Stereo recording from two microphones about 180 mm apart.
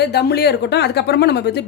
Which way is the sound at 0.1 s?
65° left (ahead or behind).